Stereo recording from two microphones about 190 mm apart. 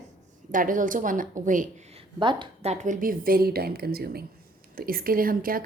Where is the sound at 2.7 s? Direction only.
40° right (ahead or behind).